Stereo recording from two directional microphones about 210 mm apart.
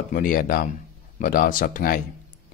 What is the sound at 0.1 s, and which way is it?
Speech, 40° left (ahead or behind).